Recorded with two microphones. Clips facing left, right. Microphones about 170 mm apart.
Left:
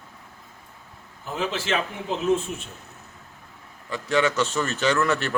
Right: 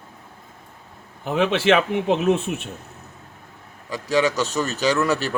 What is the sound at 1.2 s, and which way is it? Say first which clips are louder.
Speech: right 9 dB; 70° right (ahead or behind).